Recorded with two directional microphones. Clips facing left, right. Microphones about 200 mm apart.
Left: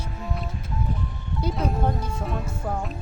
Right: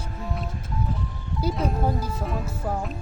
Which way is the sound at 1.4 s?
5° right (ahead or behind).